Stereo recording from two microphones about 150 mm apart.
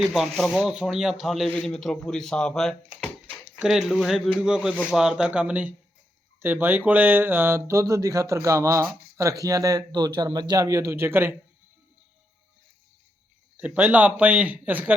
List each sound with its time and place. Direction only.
0.0 s speech: centre (ahead or behind)
13.6 s a man's voice: 10° right (ahead or behind)